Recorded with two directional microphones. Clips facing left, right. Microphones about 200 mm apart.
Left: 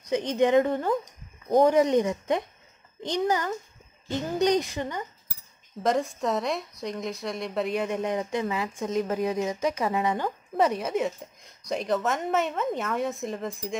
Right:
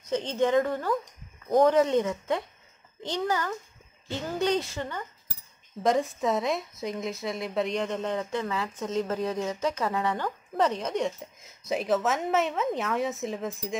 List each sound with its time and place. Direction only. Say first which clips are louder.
0.0 s a woman's voice: left 3 dB; 15° left (ahead or behind)
5.8 s a woman's voice: even; centre (ahead or behind)